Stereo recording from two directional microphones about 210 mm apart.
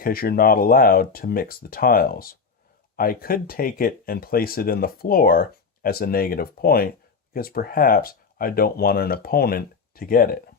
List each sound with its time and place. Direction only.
0.0 s speech: 45° left (ahead or behind)